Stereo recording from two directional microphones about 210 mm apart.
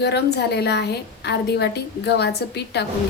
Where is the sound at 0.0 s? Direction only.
50° left (ahead or behind).